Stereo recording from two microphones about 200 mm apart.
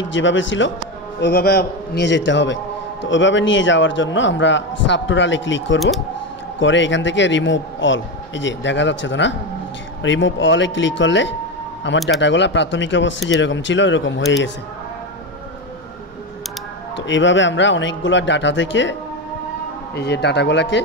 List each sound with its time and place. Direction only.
0.1 s a man's voice: 70° left (ahead or behind)
1.2 s a man's voice: 55° left (ahead or behind)
16.9 s a man's voice: 65° left (ahead or behind)
20.0 s a man's voice: 55° left (ahead or behind)